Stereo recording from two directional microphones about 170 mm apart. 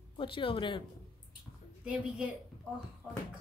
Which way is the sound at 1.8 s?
5° right (ahead or behind).